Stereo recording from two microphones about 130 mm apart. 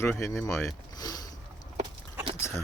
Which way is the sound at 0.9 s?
30° left (ahead or behind).